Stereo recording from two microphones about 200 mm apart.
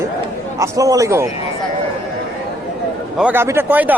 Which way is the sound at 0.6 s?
15° right (ahead or behind).